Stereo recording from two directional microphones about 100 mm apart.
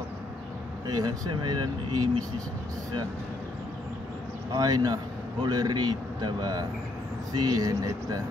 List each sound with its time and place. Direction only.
0.8 s speech: 45° right (ahead or behind)
4.6 s speech: 40° right (ahead or behind)